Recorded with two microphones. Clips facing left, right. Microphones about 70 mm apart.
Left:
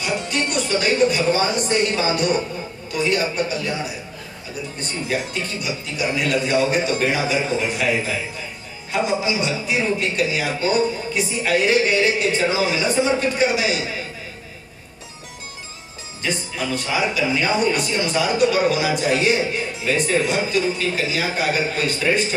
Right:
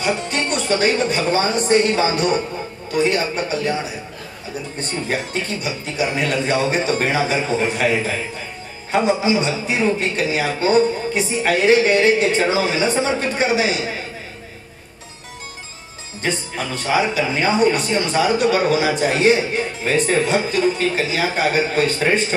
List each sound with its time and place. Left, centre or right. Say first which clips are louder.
0.0 s speech: right 2 dB; right
4.7 s speech: right 1 dB; right
8.9 s speech: right 4 dB; right
16.2 s speech: right 2 dB; right